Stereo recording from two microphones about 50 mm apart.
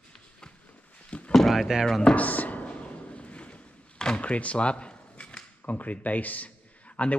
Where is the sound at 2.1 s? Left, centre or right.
Left.